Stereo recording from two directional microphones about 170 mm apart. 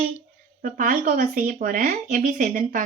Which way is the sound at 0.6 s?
50° right (ahead or behind).